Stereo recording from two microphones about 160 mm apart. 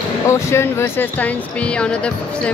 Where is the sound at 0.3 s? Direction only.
15° left (ahead or behind).